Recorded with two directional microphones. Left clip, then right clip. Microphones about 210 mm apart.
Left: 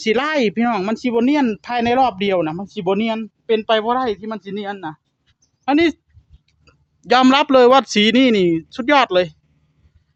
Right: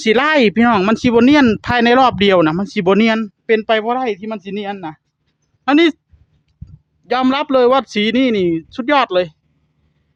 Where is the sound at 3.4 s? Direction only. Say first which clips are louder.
Right 2 dB; 20° right (ahead or behind).